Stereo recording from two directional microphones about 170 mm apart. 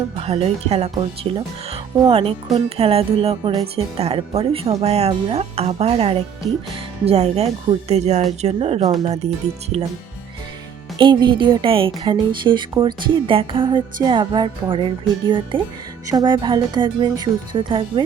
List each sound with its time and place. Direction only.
0.2 s speech: 35° right (ahead or behind)
10.9 s speech: 25° right (ahead or behind)